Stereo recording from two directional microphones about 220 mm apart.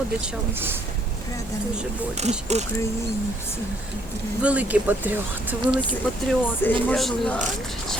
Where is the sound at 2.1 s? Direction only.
30° right (ahead or behind).